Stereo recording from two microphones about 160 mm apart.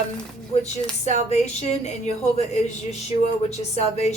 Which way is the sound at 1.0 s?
45° left (ahead or behind).